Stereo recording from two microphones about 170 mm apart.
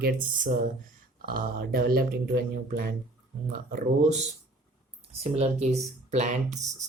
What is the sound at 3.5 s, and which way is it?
Speech, 50° right (ahead or behind).